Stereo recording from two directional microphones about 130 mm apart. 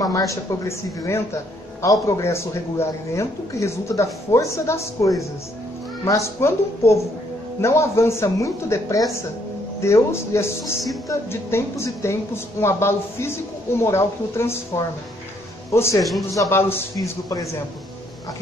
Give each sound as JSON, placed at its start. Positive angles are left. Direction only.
{"t": 0.3, "sound": "a man's voice", "side_deg": 20}
{"t": 16.0, "sound": "a man's voice", "side_deg": 0}
{"t": 16.3, "sound": "a man's voice", "side_deg": 20}